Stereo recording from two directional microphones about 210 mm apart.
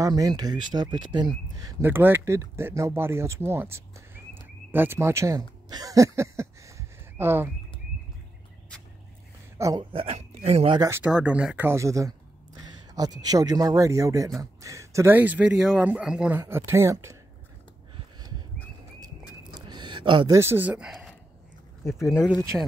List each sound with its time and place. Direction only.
0.0 s speech: 20° right (ahead or behind)
5.7 s a sound: 15° right (ahead or behind)
9.6 s speech: 20° right (ahead or behind)
10.8 s speech: 10° right (ahead or behind)
19.5 s a sound: 20° right (ahead or behind); by 21.1 s centre (ahead or behind)
22.3 s speech: 10° right (ahead or behind)